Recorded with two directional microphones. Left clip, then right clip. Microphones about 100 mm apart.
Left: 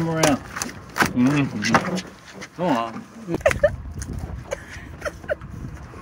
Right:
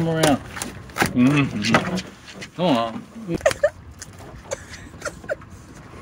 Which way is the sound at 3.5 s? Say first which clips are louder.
Left 1 dB; 5° right (ahead or behind).